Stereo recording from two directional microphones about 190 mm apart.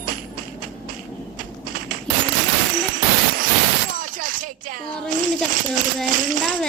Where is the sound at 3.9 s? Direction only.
45° right (ahead or behind).